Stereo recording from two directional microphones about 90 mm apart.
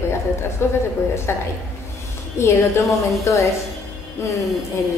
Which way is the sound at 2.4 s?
35° left (ahead or behind).